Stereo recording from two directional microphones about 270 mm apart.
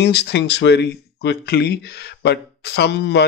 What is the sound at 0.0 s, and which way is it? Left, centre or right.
Speech, left.